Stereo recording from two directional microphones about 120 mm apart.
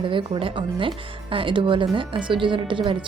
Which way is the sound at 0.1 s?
45° right (ahead or behind).